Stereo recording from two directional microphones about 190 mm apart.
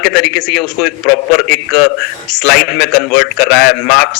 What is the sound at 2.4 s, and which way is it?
Speech, 60° left (ahead or behind).